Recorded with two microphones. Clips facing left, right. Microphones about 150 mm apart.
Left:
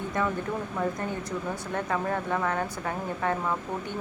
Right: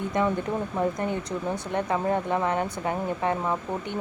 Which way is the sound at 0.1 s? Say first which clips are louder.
Right 4 dB; 20° right (ahead or behind).